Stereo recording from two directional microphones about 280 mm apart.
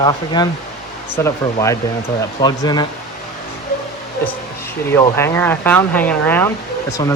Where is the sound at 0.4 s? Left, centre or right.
Centre.